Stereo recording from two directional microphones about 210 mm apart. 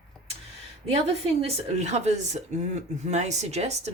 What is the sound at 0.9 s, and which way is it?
Speech, 30° right (ahead or behind).